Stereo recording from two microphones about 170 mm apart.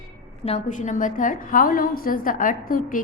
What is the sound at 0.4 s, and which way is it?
A woman's voice, 45° left (ahead or behind).